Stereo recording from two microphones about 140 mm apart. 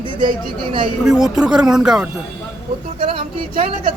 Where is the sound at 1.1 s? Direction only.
5° right (ahead or behind).